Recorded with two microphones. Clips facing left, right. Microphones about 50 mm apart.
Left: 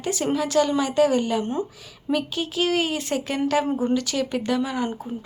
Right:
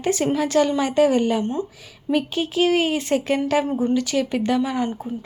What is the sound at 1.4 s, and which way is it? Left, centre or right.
Speech, centre.